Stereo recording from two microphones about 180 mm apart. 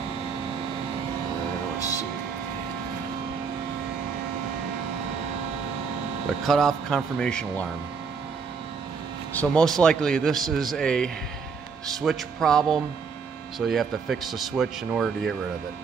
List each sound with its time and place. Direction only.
1.8 s vehicle: 20° left (ahead or behind)
6.4 s a man's voice: centre (ahead or behind)
9.3 s a man's voice: 5° left (ahead or behind)